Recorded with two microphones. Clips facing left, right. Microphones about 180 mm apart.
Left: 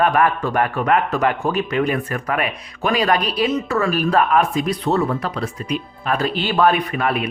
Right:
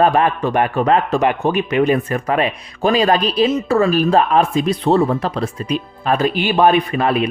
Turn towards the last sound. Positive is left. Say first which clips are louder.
# right 4 dB
turn(degrees=-25)  # may be behind; listen again after turning